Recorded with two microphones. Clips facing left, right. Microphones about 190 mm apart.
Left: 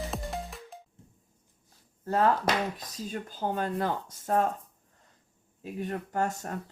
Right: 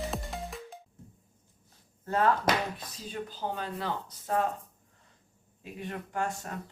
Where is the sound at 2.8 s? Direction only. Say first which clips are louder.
Left 2 dB; 45° left (ahead or behind).